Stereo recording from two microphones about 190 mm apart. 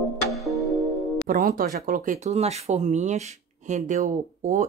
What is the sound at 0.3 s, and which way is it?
Music, centre (ahead or behind).